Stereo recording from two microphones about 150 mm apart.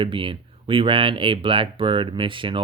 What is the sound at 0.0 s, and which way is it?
Speech, 35° right (ahead or behind).